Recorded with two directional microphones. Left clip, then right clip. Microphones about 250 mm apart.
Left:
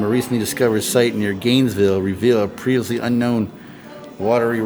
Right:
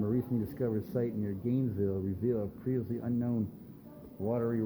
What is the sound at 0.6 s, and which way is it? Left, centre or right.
Speech, left.